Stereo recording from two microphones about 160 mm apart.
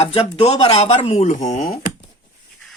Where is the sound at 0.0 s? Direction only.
40° left (ahead or behind); by 1.9 s 55° left (ahead or behind).